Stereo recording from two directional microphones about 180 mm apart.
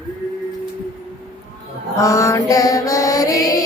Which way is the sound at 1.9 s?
15° left (ahead or behind).